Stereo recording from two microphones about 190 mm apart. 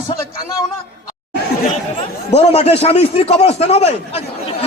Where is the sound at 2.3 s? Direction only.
35° left (ahead or behind).